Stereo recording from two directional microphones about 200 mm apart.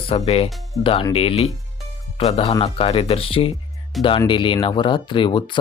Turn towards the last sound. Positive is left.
turn(degrees=25)  # may be behind; listen again after turning